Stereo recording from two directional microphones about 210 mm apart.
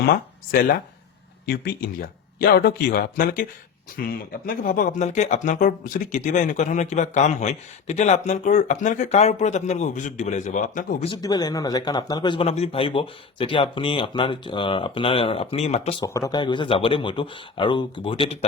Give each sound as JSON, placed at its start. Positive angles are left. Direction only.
{"t": 0.0, "sound": "speech", "side_deg": 45}
{"t": 11.1, "sound": "speech", "side_deg": 20}
{"t": 16.0, "sound": "speech", "side_deg": 15}